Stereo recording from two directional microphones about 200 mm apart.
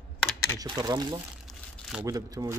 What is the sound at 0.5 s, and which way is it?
Speech, 20° right (ahead or behind).